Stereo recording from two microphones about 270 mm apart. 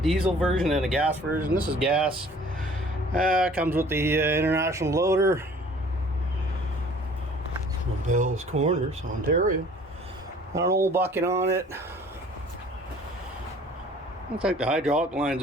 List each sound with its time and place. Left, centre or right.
0.0 s speech: centre
3.1 s speech: right
3.6 s speech: centre
8.1 s speech: right
10.5 s speech: centre
14.4 s speech: centre